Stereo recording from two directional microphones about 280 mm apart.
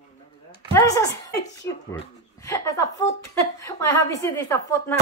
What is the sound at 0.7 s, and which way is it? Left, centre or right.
A woman's voice, centre.